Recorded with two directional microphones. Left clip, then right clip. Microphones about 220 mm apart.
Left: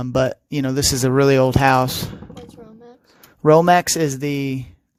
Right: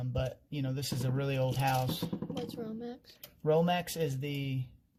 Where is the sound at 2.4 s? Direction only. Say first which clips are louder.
Even; 15° right (ahead or behind).